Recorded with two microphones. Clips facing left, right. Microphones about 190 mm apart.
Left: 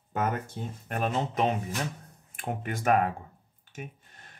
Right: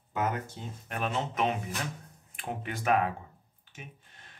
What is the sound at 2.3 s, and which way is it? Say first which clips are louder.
Speech: left 3 dB; 50° left (ahead or behind).